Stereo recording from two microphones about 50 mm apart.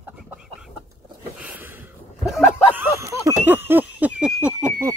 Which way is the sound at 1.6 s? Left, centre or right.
Right.